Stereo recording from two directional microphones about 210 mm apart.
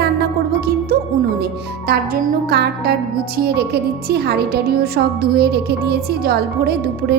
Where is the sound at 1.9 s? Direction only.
50° right (ahead or behind).